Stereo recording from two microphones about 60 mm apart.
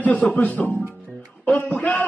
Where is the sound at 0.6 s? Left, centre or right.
Left.